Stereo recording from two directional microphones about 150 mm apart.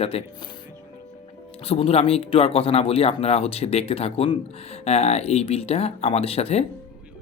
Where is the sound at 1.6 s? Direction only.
40° left (ahead or behind).